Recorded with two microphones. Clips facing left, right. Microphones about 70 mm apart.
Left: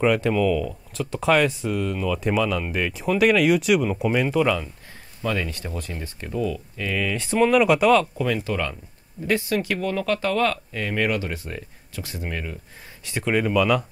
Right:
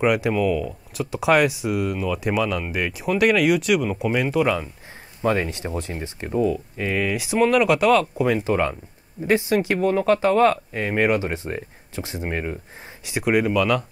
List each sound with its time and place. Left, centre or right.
0.0 s speech: centre
5.2 s speech: right
7.0 s speech: centre
8.2 s speech: right
13.0 s speech: centre